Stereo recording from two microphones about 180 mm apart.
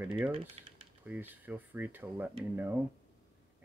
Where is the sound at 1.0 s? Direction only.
10° right (ahead or behind).